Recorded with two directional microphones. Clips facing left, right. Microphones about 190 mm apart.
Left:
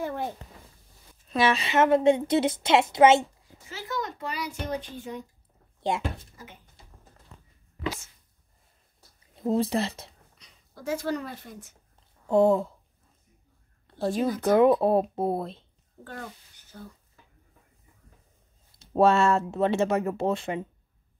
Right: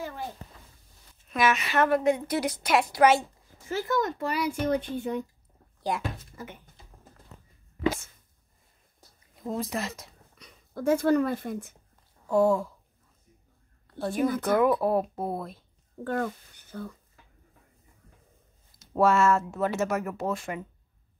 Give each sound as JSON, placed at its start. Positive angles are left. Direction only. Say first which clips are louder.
{"t": 0.0, "sound": "speech", "louder": "left 5 dB", "side_deg": 60}
{"t": 1.3, "sound": "a woman's voice", "louder": "left 2 dB", "side_deg": 30}
{"t": 3.6, "sound": "speech", "louder": "right 6 dB", "side_deg": -50}
{"t": 5.8, "sound": "a sound", "louder": "left 2 dB", "side_deg": 25}
{"t": 6.3, "sound": "speech", "louder": "right 6 dB", "side_deg": -55}
{"t": 9.3, "sound": "speech", "louder": "left 6 dB", "side_deg": 30}
{"t": 10.4, "sound": "speech", "louder": "right 8 dB", "side_deg": -55}
{"t": 12.3, "sound": "a woman's voice", "louder": "left 2 dB", "side_deg": 20}
{"t": 13.8, "sound": "a woman's voice", "louder": "left 1 dB", "side_deg": 25}
{"t": 16.7, "sound": "speech", "louder": "right 7 dB", "side_deg": -70}
{"t": 18.9, "sound": "a woman's voice", "louder": "left 1 dB", "side_deg": 30}